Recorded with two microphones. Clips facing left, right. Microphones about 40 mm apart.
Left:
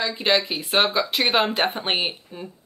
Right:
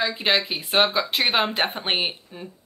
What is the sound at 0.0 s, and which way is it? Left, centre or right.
Speech, centre.